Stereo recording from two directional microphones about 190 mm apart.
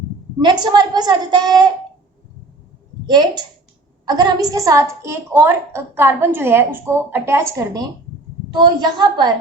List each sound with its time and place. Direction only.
0.3 s a woman's voice: 25° right (ahead or behind)
3.1 s a woman's voice: 20° right (ahead or behind)